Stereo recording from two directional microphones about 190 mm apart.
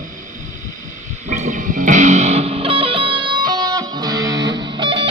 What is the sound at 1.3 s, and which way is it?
Music, 40° right (ahead or behind).